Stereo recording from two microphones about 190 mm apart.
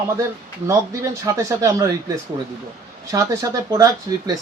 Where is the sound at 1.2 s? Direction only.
15° right (ahead or behind).